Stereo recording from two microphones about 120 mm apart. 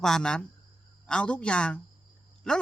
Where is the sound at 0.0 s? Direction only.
5° left (ahead or behind).